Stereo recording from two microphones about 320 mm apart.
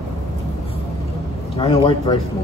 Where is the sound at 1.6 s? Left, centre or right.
Centre.